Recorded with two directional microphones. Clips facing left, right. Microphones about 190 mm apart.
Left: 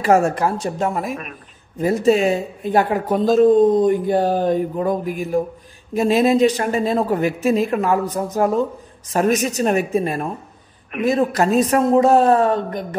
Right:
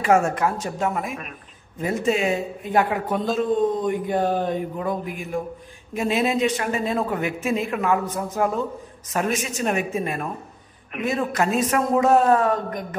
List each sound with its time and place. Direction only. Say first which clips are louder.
0.0 s speech: left 3 dB; 35° left (ahead or behind)